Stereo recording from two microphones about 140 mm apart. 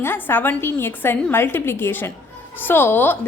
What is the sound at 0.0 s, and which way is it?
A woman's voice, 15° left (ahead or behind).